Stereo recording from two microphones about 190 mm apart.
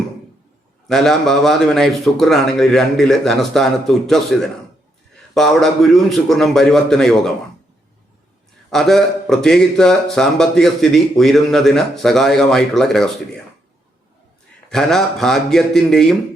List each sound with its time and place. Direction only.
0.9 s a man's voice: centre (ahead or behind)
8.7 s a man's voice: centre (ahead or behind)
14.7 s a man's voice: centre (ahead or behind)